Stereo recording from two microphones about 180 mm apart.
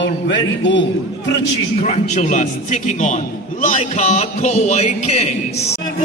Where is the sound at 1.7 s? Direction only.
40° left (ahead or behind).